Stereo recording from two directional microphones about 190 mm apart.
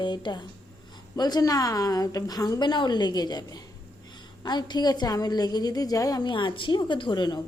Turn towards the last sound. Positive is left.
turn(degrees=20)  # may be behind; listen again after turning